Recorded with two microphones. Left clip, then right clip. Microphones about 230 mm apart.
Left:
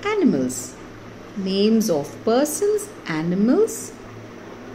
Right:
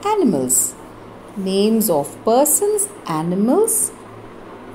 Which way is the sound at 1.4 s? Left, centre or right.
Centre.